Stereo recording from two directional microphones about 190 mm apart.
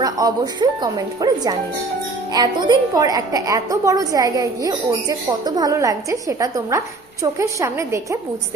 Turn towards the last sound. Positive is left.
turn(degrees=-15)  # may be behind; listen again after turning